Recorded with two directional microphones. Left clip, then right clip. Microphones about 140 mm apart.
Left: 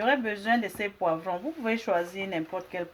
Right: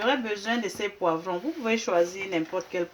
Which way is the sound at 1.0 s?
40° left (ahead or behind).